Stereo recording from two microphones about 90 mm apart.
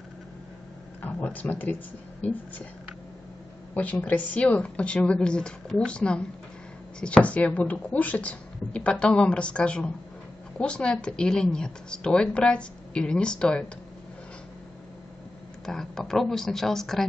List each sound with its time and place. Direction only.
1.0 s a woman's voice: 20° left (ahead or behind)
3.7 s a woman's voice: 15° left (ahead or behind)
15.6 s speech: 5° left (ahead or behind)